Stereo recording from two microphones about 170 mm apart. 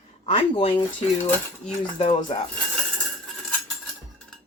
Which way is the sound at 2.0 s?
45° left (ahead or behind).